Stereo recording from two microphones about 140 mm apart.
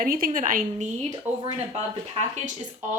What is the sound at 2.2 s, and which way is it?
Speech, 55° right (ahead or behind).